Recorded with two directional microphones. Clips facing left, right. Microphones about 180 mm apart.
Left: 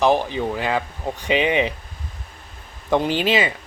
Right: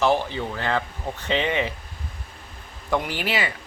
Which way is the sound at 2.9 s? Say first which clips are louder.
Left 6 dB; 20° left (ahead or behind).